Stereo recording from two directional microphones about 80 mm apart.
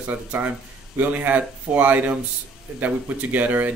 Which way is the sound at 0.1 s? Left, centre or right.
Right.